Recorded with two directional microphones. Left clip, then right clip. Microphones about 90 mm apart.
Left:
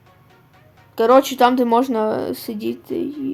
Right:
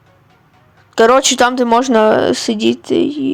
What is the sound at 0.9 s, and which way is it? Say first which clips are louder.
Speech: right 4 dB; 70° right (ahead or behind).